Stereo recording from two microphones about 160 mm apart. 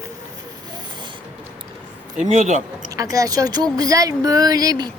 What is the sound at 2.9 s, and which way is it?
Speech, 20° right (ahead or behind).